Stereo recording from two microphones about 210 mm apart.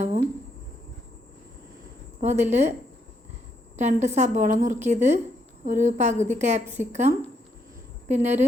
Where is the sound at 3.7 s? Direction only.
35° right (ahead or behind).